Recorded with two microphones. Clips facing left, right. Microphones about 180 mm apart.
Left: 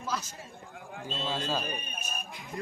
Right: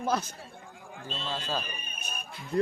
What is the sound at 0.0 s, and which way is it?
Speech, 60° right (ahead or behind).